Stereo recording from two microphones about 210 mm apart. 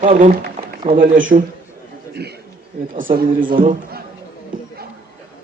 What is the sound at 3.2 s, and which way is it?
Speech, 40° right (ahead or behind).